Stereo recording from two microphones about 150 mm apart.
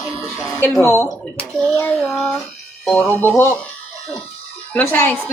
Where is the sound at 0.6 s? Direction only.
15° left (ahead or behind).